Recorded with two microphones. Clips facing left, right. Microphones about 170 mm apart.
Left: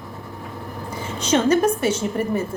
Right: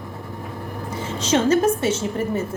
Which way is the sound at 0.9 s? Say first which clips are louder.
Even; 30° right (ahead or behind).